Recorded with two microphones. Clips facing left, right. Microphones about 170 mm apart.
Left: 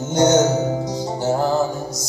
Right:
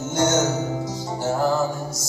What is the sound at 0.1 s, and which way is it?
Music, 20° left (ahead or behind).